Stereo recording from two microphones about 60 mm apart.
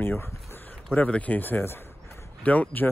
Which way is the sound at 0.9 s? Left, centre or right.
Left.